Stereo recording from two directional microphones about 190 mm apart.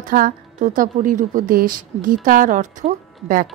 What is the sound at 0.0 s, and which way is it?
Speech, 45° right (ahead or behind).